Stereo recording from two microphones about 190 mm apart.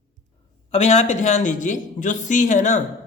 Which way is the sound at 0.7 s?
35° left (ahead or behind).